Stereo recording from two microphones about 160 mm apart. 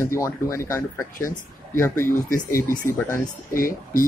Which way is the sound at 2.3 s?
60° left (ahead or behind).